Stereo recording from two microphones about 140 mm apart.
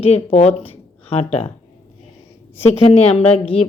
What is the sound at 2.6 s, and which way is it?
A woman's voice, 50° left (ahead or behind).